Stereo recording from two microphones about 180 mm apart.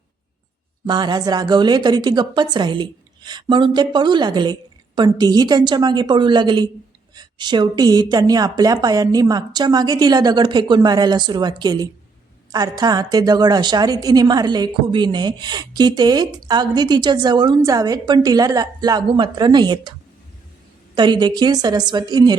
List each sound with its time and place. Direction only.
0.9 s a woman's voice: 25° right (ahead or behind)
20.9 s a woman's voice: 25° right (ahead or behind)